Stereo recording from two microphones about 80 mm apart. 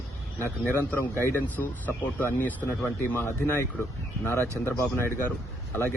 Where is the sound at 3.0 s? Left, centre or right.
Left.